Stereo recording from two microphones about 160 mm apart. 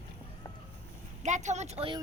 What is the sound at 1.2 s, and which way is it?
Speech, 50° right (ahead or behind).